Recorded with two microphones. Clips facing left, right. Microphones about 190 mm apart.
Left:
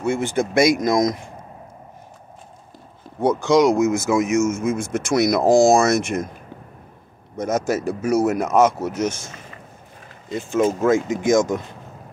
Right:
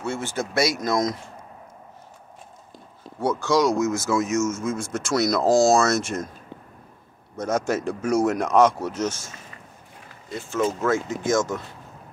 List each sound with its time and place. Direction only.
0.0 s speech: 15° left (ahead or behind)
3.2 s speech: 20° left (ahead or behind)
7.3 s speech: 5° left (ahead or behind)
10.3 s speech: 15° left (ahead or behind)